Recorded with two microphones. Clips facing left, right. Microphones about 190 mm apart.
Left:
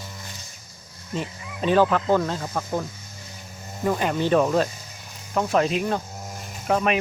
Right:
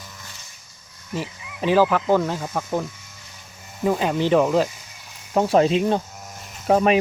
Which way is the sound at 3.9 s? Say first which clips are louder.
Right 2 dB; 15° right (ahead or behind).